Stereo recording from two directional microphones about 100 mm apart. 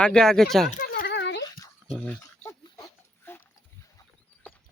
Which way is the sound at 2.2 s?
30° left (ahead or behind).